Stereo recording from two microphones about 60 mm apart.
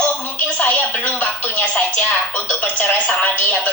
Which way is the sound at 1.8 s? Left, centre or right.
Left.